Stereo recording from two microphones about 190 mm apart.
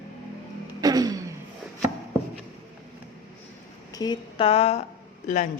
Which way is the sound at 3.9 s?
20° left (ahead or behind).